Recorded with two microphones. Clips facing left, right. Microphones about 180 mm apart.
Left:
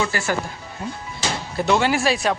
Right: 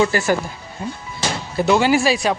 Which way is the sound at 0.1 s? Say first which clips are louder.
Right 6 dB; 40° right (ahead or behind).